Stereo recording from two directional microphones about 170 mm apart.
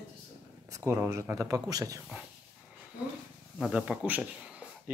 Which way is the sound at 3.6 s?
5° right (ahead or behind).